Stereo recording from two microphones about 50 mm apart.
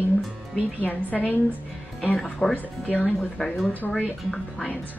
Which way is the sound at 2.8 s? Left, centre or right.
Left.